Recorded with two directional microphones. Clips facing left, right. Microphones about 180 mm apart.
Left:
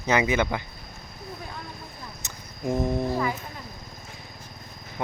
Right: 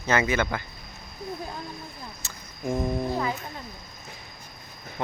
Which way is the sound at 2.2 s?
20° left (ahead or behind).